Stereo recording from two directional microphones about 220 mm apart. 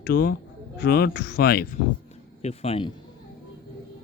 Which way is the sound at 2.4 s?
30° left (ahead or behind).